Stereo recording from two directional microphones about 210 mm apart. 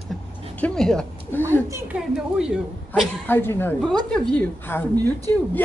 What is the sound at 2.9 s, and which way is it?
A woman's voice, 10° left (ahead or behind).